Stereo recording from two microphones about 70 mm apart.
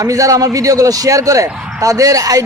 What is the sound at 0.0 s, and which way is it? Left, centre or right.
A man's voice, right.